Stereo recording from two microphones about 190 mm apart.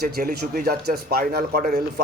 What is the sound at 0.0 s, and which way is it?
A man's voice, 50° right (ahead or behind).